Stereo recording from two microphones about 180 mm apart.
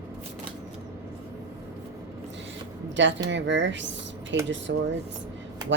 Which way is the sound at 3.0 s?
90° right.